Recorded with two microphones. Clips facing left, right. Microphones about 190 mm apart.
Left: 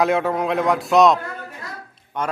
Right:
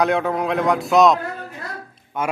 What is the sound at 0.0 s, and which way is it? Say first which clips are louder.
A man's voice: even; centre (ahead or behind).